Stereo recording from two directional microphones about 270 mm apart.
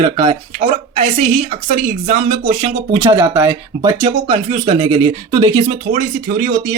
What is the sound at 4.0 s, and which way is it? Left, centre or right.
Speech, right.